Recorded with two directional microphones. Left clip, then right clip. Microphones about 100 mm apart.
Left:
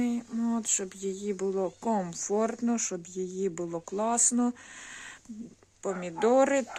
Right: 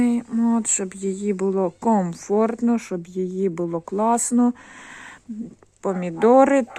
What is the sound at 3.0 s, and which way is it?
Speech, 45° right (ahead or behind).